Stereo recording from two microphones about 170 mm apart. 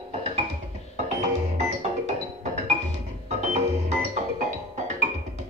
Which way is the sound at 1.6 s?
40° right (ahead or behind).